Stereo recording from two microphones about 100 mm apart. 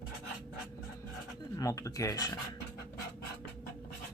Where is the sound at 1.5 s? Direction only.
35° left (ahead or behind).